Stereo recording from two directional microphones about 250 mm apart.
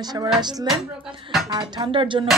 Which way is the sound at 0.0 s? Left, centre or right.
Centre.